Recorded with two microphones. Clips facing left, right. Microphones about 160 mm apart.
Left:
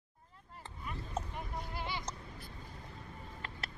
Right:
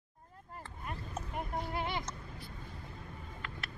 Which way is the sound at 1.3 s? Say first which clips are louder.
Right 5 dB; 55° right (ahead or behind).